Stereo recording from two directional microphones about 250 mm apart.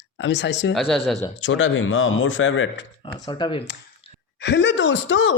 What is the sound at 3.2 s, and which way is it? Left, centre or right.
Speech, centre.